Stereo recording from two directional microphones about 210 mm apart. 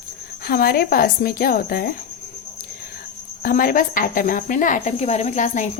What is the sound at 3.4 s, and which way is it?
A woman's voice, 40° left (ahead or behind).